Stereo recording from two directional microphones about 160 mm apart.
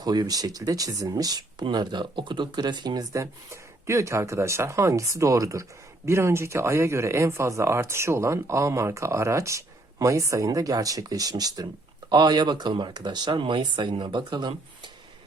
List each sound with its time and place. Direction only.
0.0 s speech: 25° right (ahead or behind)